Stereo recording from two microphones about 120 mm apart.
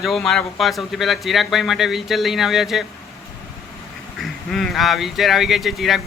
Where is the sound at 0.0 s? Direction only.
Centre (ahead or behind).